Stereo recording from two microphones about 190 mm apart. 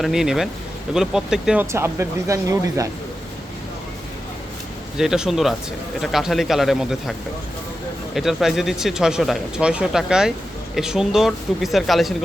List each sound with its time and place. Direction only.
0.0 s speech: centre (ahead or behind)
1.7 s speech: 15° right (ahead or behind)
4.9 s speech: 5° right (ahead or behind)